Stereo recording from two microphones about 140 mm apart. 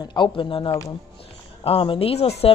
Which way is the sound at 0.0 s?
35° left (ahead or behind).